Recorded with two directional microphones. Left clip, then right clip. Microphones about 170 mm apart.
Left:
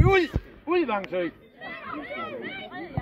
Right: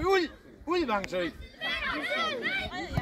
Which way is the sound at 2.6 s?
90° right.